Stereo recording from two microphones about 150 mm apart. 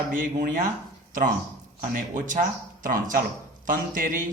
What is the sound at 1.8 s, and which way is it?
A man's voice, 60° right (ahead or behind).